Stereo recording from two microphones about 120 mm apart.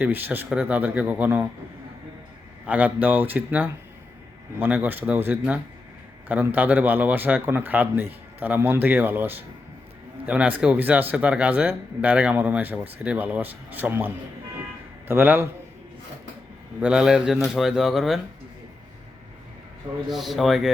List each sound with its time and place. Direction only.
0.0 s speech: 15° right (ahead or behind)
2.6 s speech: 15° right (ahead or behind)
16.8 s speech: 5° right (ahead or behind)
20.1 s speech: centre (ahead or behind)